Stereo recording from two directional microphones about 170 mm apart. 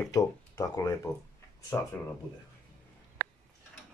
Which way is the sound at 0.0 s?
20° left (ahead or behind).